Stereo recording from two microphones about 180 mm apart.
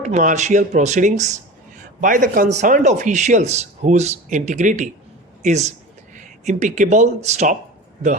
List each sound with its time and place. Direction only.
0.0 s a man's voice: 45° right (ahead or behind)